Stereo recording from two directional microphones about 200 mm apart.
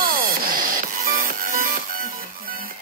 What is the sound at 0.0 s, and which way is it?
Music, 45° right (ahead or behind).